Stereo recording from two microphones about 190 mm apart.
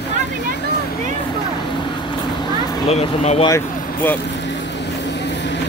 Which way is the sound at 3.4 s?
15° left (ahead or behind).